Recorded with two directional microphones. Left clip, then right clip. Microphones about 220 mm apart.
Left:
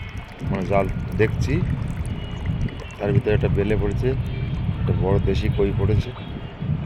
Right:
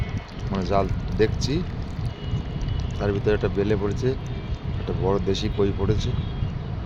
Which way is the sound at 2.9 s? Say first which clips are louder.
Left 1 dB; centre (ahead or behind).